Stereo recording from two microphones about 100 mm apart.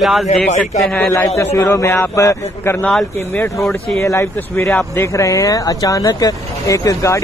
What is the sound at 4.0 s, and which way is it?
Speech, 25° left (ahead or behind).